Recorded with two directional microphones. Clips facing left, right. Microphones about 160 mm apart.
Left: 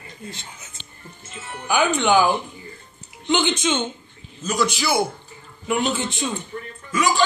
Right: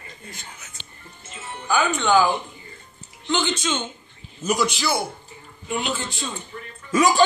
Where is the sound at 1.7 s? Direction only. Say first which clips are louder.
Left 1 dB; 15° left (ahead or behind).